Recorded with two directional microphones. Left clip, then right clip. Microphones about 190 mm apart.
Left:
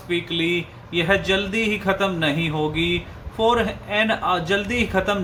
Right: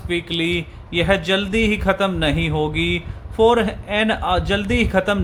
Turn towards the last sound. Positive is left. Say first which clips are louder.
# right 3 dB
turn(degrees=-45)  # may be behind; listen again after turning